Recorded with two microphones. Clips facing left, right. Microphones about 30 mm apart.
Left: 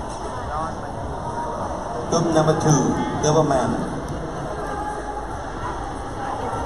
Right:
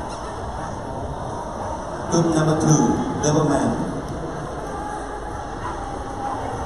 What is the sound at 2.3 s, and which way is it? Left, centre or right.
A man's voice, centre.